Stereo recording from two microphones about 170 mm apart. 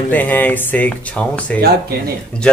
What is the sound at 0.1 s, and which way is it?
Speech, 10° left (ahead or behind).